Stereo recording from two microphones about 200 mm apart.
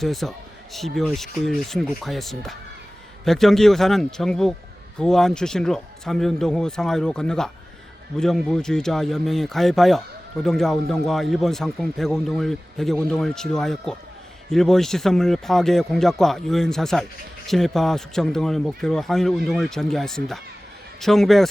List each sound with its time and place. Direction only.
0.0 s a man's voice: centre (ahead or behind)